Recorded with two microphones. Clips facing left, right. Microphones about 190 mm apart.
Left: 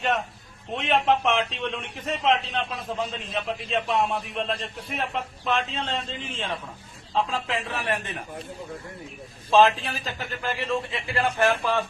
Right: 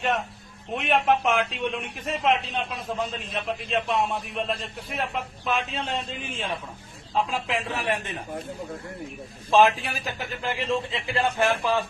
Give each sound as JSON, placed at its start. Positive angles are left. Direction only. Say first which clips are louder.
{"t": 0.8, "sound": "a man's voice", "louder": "even", "side_deg": -5}
{"t": 9.5, "sound": "a man's voice", "louder": "even", "side_deg": -15}